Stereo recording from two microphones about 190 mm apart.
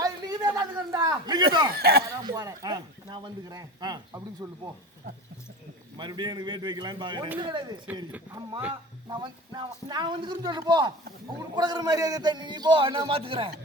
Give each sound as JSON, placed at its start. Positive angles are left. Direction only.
{"t": 0.0, "sound": "a sound", "side_deg": -20}
{"t": 1.7, "sound": "speech", "side_deg": -55}
{"t": 2.2, "sound": "speech", "side_deg": -15}
{"t": 6.0, "sound": "speech", "side_deg": -25}
{"t": 9.0, "sound": "speech", "side_deg": -25}